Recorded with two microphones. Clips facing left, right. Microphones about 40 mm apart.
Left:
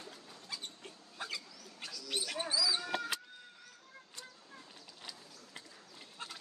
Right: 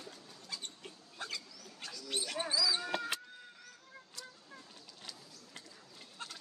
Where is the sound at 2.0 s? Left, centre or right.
Centre.